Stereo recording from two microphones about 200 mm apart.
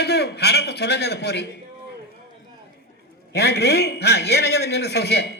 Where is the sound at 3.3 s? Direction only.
55° left (ahead or behind).